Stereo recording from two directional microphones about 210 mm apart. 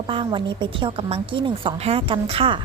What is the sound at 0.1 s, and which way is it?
A woman's voice, 25° right (ahead or behind).